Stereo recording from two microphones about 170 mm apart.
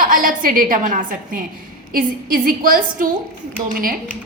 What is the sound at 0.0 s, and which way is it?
A woman's voice, 55° right (ahead or behind).